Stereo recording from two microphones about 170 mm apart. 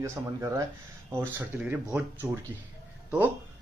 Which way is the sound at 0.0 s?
15° right (ahead or behind).